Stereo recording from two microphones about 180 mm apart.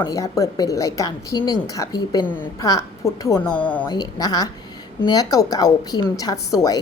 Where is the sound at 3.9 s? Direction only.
20° left (ahead or behind).